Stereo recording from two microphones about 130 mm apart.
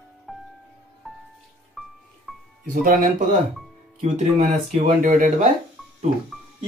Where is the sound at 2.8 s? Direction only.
90° right.